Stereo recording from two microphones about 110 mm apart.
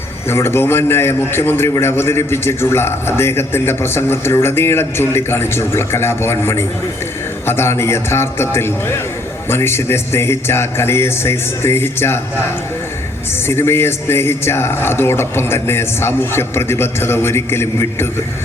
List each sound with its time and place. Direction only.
0.3 s a man's voice: 20° left (ahead or behind)
13.5 s a man's voice: 25° left (ahead or behind)